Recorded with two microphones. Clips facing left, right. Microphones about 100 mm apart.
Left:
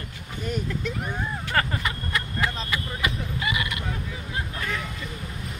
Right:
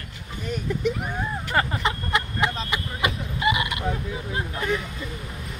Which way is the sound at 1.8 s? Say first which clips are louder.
Right 4 dB; 20° right (ahead or behind).